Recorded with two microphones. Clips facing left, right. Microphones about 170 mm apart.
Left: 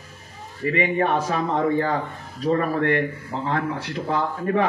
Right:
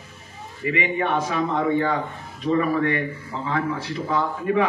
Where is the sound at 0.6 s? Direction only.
40° left (ahead or behind).